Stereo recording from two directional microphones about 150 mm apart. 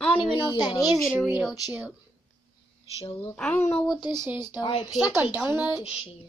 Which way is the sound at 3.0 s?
40° left (ahead or behind).